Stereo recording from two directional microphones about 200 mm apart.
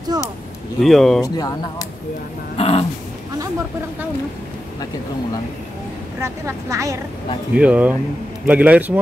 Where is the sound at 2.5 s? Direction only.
30° left (ahead or behind).